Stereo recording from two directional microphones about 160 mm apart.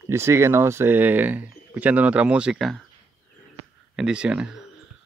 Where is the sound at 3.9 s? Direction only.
5° right (ahead or behind).